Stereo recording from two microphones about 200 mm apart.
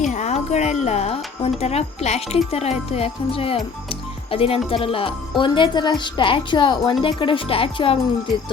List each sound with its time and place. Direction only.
0.0 s a woman's voice: 35° left (ahead or behind)